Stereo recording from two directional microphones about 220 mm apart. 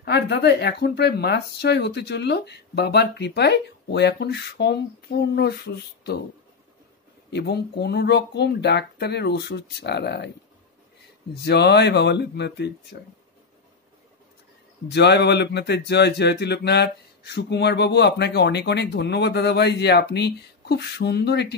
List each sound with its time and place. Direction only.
0.0 s speech: 50° left (ahead or behind)
7.2 s speech: 50° left (ahead or behind)
11.3 s speech: 50° left (ahead or behind)
14.9 s speech: 50° left (ahead or behind)